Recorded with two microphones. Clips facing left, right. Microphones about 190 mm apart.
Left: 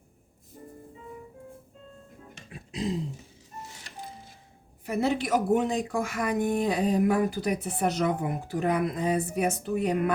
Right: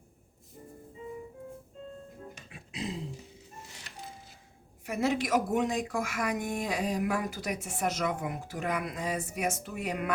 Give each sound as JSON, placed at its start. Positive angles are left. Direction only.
{"t": 4.9, "sound": "speech", "side_deg": 35}